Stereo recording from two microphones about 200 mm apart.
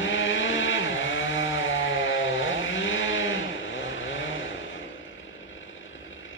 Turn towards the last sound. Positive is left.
turn(degrees=75)  # may be behind; listen again after turning